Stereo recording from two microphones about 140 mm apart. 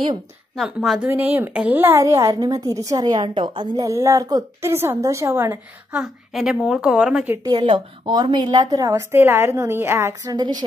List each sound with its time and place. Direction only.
0.6 s a woman's voice: 5° right (ahead or behind)
7.4 s a woman's voice: 35° right (ahead or behind)